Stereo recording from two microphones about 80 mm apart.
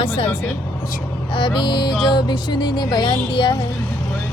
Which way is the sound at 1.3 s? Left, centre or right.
Left.